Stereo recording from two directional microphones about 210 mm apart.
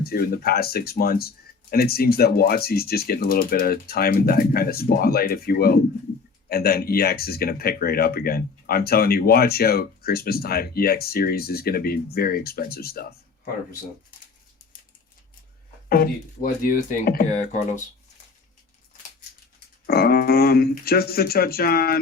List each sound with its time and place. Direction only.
0.0 s speech: 45° left (ahead or behind)
15.9 s speech: 45° left (ahead or behind)
19.9 s speech: 45° left (ahead or behind)